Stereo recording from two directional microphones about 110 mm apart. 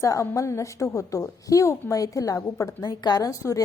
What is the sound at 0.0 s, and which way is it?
A woman's voice, 30° left (ahead or behind).